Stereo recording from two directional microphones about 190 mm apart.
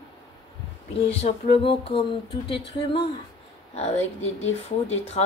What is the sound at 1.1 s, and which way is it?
Music, 30° left (ahead or behind).